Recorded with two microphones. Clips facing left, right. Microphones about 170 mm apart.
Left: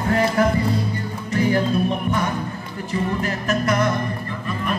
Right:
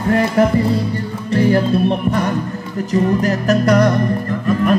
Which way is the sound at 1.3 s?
30° right (ahead or behind).